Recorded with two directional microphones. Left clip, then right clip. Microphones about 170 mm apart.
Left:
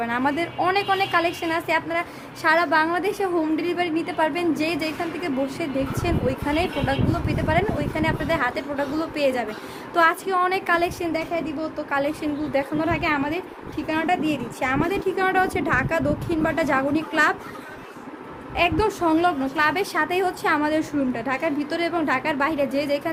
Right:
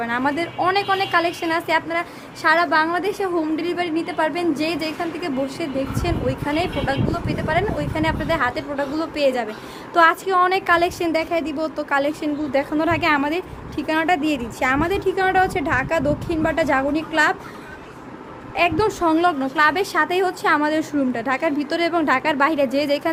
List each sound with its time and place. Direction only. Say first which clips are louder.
0.0 s a woman's voice: right 2 dB; 10° right (ahead or behind); by 15.1 s 25° right (ahead or behind)
15.1 s a woman's voice: right 3 dB; 10° right (ahead or behind)
18.5 s a woman's voice: right 2 dB; 15° right (ahead or behind); by 23.1 s 40° right (ahead or behind)